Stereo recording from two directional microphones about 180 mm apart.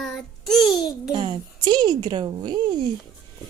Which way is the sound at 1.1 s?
25° right (ahead or behind).